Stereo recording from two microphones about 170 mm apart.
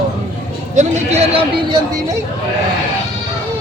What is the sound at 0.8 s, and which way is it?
A man's voice, 40° right (ahead or behind).